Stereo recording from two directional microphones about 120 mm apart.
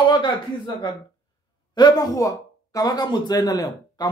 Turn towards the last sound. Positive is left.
turn(degrees=35)  # may be behind; listen again after turning